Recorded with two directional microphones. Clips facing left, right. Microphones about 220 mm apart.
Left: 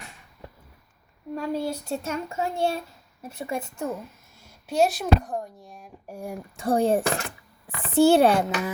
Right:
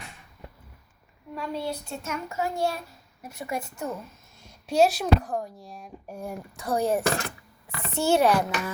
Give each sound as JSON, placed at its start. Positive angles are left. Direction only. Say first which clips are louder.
{"t": 1.4, "sound": "speech", "louder": "left 3 dB", "side_deg": 45}
{"t": 4.4, "sound": "speech", "louder": "right 1 dB", "side_deg": 0}
{"t": 6.1, "sound": "speech", "louder": "left 1 dB", "side_deg": 10}
{"t": 6.6, "sound": "speech", "louder": "left 3 dB", "side_deg": 30}